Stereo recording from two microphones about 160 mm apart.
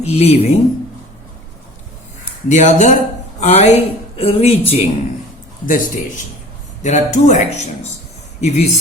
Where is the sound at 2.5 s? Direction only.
50° left (ahead or behind).